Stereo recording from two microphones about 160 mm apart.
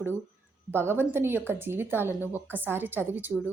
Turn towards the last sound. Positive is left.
turn(degrees=-10)  # may be behind; listen again after turning